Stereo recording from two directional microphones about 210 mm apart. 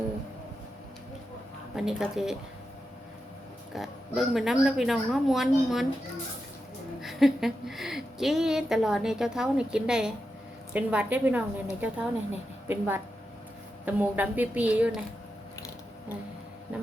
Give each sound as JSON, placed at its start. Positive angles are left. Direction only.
{"t": 1.7, "sound": "a woman's voice", "side_deg": -5}
{"t": 3.7, "sound": "a woman's voice", "side_deg": 0}
{"t": 7.0, "sound": "a woman's voice", "side_deg": 0}